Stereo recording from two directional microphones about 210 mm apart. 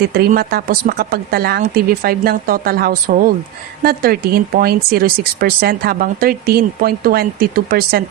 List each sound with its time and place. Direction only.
0.0 s speech: 45° right (ahead or behind)